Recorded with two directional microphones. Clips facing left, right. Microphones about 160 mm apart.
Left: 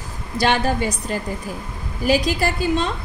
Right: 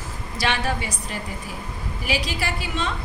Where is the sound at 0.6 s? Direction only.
40° left (ahead or behind).